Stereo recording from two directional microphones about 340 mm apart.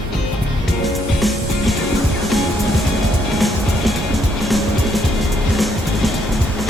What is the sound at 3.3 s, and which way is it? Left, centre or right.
Music, centre.